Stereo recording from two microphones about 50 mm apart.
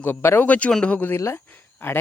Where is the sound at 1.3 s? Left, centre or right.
Left.